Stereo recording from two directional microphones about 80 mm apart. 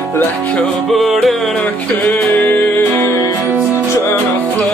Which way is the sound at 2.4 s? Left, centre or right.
Left.